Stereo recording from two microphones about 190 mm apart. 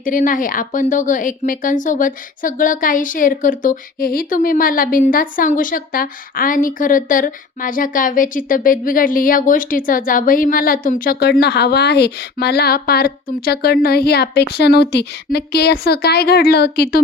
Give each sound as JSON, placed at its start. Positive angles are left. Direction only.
{"t": 0.0, "sound": "speech", "side_deg": 45}